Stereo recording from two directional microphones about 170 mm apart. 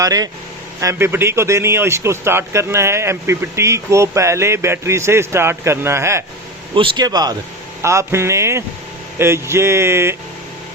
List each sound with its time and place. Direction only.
0.0 s speech: 20° right (ahead or behind)
6.7 s speech: 30° right (ahead or behind)